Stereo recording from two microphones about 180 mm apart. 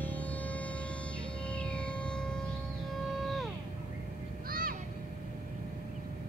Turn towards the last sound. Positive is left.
turn(degrees=-55)  # may be behind; listen again after turning